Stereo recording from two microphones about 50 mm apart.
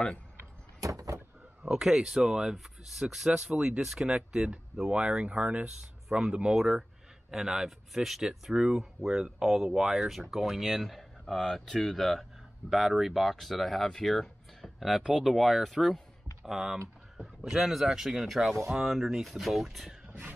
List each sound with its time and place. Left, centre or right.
0.8 s vehicle: right
1.6 s speech: centre
6.0 s speech: centre
20.1 s vehicle: right